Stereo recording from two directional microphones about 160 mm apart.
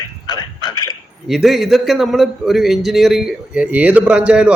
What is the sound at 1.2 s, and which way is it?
Speech, centre (ahead or behind).